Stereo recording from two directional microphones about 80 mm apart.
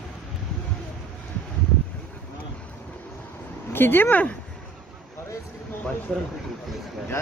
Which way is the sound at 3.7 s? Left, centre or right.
Left.